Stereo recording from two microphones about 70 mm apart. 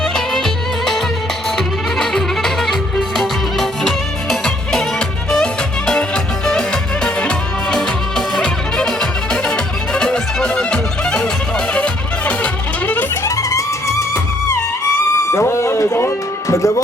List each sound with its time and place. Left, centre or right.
0.0 s music: centre; by 13.1 s left
13.2 s music: left
15.3 s music: left